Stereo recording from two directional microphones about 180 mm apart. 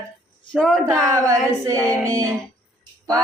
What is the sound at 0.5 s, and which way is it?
Music, 5° left (ahead or behind).